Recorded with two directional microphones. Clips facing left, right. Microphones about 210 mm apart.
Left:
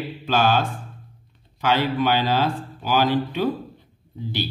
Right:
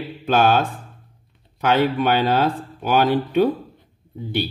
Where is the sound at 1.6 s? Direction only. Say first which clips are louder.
Right 3 dB; 55° right (ahead or behind).